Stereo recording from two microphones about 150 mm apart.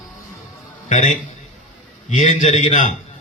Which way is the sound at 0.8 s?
50° left (ahead or behind).